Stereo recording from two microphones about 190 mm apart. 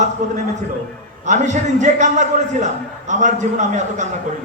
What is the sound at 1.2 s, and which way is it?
A man's voice, 40° right (ahead or behind).